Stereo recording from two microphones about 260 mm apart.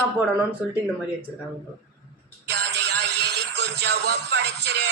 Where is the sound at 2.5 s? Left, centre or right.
Right.